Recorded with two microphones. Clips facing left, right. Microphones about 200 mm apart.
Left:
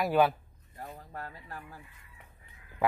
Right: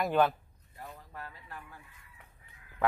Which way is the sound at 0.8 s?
45° left (ahead or behind).